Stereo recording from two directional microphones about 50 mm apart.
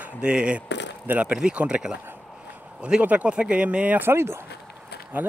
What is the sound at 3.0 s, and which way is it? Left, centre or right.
Speech, right.